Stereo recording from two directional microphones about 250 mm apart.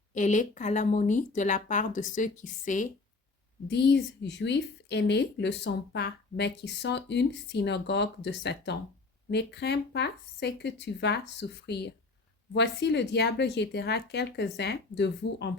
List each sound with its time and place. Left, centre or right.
0.1 s speech: left
3.7 s a woman's voice: left